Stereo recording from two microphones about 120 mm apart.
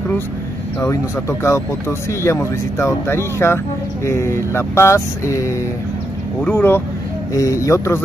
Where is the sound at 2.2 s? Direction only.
25° left (ahead or behind).